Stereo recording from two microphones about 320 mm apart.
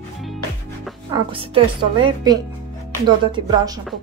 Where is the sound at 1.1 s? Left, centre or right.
Centre.